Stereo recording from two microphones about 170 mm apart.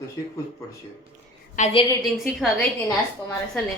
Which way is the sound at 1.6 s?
50° left (ahead or behind).